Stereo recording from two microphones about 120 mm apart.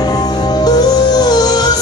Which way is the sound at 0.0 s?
35° left (ahead or behind).